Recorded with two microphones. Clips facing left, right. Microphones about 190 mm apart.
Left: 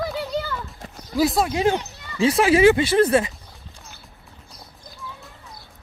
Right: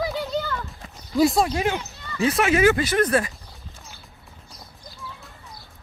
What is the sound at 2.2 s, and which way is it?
Speech, 30° left (ahead or behind).